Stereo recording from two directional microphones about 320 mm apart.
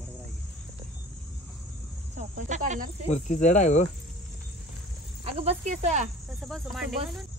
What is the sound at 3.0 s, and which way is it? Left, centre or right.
Speech, left.